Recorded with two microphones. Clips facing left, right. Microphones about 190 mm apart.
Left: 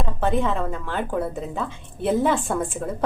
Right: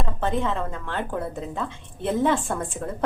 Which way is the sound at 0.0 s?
10° left (ahead or behind).